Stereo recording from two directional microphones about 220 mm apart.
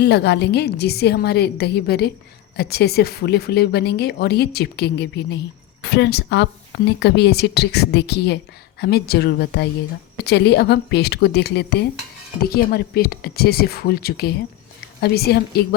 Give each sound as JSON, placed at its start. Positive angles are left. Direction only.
{"t": 0.0, "sound": "speech", "side_deg": 50}